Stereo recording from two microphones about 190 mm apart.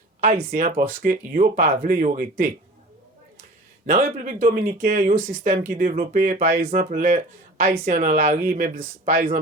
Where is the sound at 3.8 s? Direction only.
45° right (ahead or behind).